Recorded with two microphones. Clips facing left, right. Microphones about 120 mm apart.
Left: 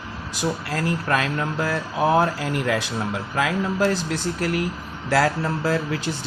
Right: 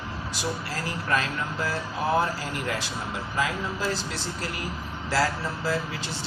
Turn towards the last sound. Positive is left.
turn(degrees=60)  # may be behind; listen again after turning